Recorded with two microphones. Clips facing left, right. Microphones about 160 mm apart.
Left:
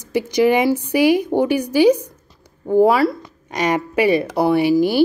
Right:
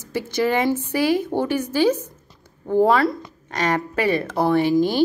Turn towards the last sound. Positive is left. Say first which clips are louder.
# left 3 dB
turn(degrees=10)  # may be behind; listen again after turning